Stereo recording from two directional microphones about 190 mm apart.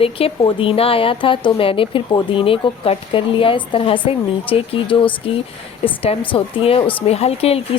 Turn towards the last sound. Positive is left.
turn(degrees=30)  # may be behind; listen again after turning